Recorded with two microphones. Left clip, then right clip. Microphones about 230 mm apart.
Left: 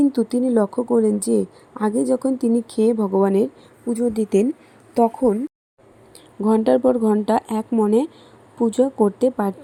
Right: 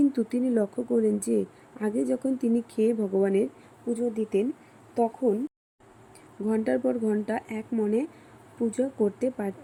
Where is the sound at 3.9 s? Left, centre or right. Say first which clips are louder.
Left 8 dB; left.